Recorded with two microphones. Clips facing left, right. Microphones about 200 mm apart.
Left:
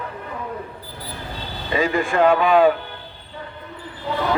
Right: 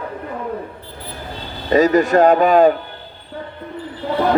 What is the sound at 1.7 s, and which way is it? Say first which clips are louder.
A man's voice: right 8 dB; 40° right (ahead or behind).